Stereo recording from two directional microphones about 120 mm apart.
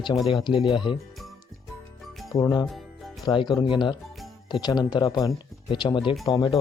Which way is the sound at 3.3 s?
40° left (ahead or behind).